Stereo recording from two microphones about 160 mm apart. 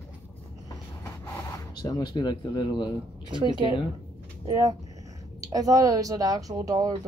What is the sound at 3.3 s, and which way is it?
Speech, 30° right (ahead or behind).